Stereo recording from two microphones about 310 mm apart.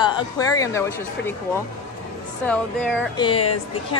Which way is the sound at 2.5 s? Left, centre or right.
Centre.